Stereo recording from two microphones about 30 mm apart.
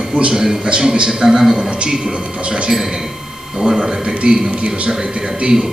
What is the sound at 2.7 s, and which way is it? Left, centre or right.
A man's voice, right.